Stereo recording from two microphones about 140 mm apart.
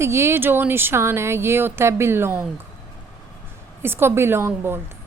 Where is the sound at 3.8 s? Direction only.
15° right (ahead or behind).